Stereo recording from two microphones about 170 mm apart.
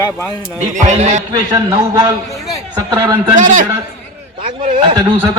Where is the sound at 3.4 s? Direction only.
45° right (ahead or behind).